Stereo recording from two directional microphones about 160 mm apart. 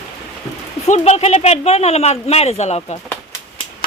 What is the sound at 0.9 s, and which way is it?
Speech, 45° left (ahead or behind).